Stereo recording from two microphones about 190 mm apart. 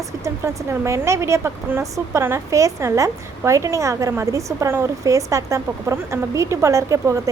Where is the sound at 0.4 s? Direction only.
15° right (ahead or behind).